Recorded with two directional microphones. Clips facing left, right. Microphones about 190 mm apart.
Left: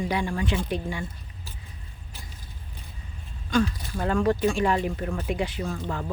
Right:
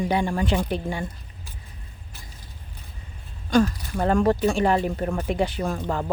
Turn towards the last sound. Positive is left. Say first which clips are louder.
# right 4 dB
turn(degrees=-50)  # may be behind; listen again after turning